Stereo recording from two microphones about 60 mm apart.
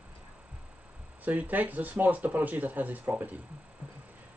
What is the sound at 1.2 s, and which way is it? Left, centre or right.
Speech, right.